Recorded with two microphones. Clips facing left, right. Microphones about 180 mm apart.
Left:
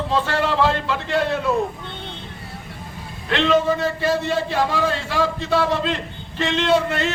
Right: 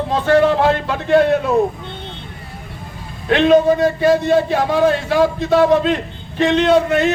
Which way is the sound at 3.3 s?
50° right (ahead or behind).